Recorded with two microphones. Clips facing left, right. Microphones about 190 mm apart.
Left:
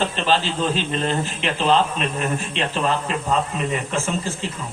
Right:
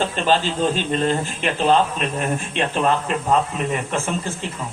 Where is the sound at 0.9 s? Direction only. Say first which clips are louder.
Right 2 dB; 45° right (ahead or behind).